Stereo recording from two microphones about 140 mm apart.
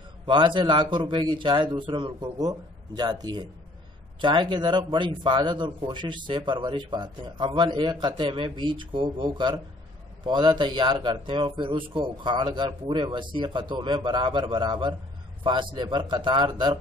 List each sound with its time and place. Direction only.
0.3 s speech: 35° right (ahead or behind)